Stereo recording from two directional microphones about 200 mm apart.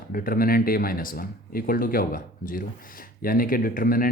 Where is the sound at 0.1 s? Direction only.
45° left (ahead or behind).